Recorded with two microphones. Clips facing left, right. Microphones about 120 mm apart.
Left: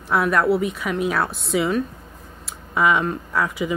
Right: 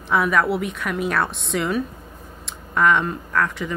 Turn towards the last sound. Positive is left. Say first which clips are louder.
# left 1 dB
turn(degrees=10)  # may be behind; listen again after turning